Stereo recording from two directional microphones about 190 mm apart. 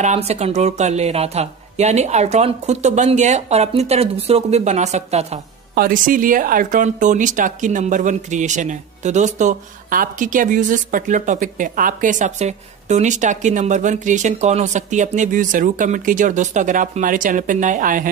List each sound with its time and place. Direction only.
0.0 s speech: 35° right (ahead or behind)
5.8 s speech: 45° right (ahead or behind)